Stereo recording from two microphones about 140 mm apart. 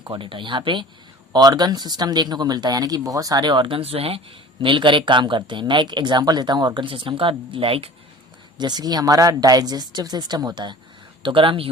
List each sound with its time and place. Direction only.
0.0 s speech: 35° right (ahead or behind)
8.5 s speech: 30° right (ahead or behind)